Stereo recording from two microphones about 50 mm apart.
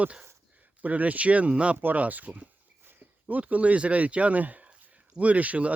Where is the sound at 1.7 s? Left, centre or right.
Right.